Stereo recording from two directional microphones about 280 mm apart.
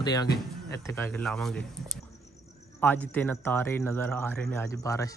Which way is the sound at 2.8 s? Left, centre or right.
Centre.